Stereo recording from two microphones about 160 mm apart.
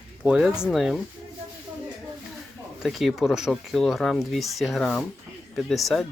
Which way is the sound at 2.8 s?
Centre (ahead or behind).